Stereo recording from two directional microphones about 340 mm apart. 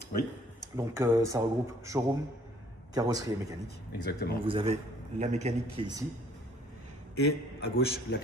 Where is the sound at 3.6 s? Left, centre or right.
Left.